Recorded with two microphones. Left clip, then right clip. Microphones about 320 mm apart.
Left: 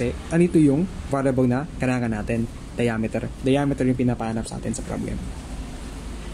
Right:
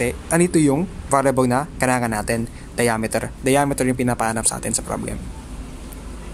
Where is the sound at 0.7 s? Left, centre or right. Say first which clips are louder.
Right 5 dB; right.